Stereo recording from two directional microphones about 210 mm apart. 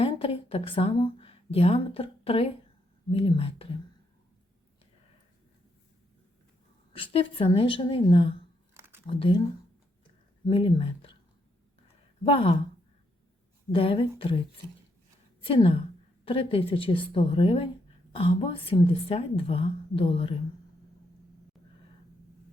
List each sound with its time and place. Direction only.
0.0 s a woman's voice: 25° left (ahead or behind)
6.9 s a woman's voice: 25° left (ahead or behind)
8.7 s a sound: 10° right (ahead or behind)
9.0 s a woman's voice: 25° left (ahead or behind)
10.5 s speech: 25° left (ahead or behind)
12.2 s a woman's voice: 25° left (ahead or behind)
13.7 s a woman's voice: 25° left (ahead or behind)